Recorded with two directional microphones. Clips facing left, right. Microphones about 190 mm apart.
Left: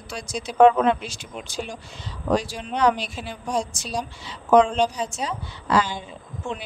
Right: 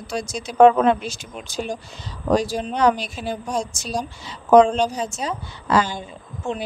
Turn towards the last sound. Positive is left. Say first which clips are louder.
# right 4 dB
turn(degrees=-45)  # may be behind; listen again after turning